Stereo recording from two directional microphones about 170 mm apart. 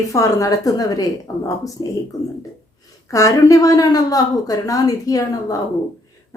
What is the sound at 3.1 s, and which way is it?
A woman's voice, 20° left (ahead or behind).